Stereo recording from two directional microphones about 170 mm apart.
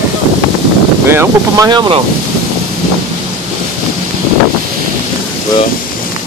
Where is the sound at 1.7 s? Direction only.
25° right (ahead or behind).